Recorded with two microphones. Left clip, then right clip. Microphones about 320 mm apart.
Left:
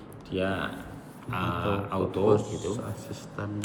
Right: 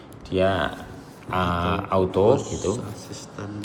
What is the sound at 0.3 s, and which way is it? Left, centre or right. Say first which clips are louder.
Speech: right 8 dB; centre.